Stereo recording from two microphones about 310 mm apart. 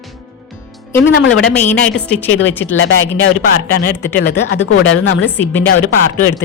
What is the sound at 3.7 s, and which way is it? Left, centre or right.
Speech, left.